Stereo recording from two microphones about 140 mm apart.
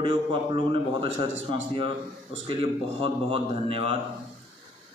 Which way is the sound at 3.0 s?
40° right (ahead or behind).